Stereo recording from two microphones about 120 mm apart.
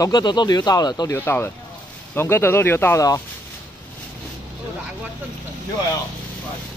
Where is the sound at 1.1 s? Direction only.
15° left (ahead or behind).